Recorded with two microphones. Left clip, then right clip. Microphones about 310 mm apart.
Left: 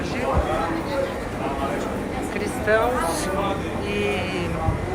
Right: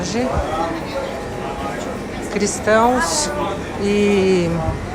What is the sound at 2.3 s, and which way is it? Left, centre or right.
Speech, centre.